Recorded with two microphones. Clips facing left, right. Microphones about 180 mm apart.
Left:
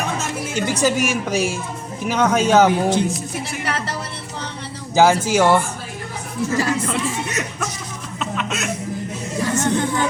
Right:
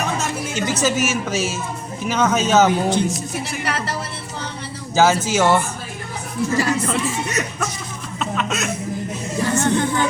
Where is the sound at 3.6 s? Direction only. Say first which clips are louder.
Even; centre (ahead or behind).